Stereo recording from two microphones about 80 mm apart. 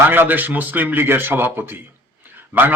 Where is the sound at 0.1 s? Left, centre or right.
Right.